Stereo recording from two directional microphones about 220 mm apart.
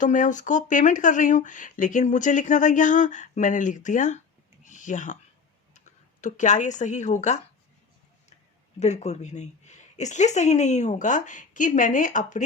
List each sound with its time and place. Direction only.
0.0 s speech: 35° left (ahead or behind)
4.6 s a sound: 35° left (ahead or behind)
5.7 s speech: 35° left (ahead or behind)
8.8 s speech: 30° left (ahead or behind)